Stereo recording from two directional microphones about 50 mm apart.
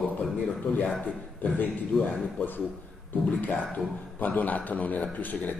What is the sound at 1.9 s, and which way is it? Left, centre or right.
Speech, centre.